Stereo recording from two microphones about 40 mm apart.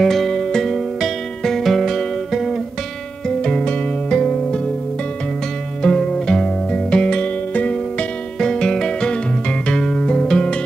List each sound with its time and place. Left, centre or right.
0.0 s music: centre
3.3 s music: centre
5.8 s music: left
8.4 s music: centre